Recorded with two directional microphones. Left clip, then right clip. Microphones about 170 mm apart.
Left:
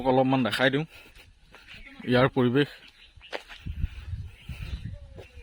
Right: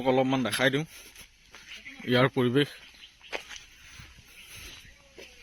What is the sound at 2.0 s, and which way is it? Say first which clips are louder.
Speech: left 2 dB; 30° left (ahead or behind).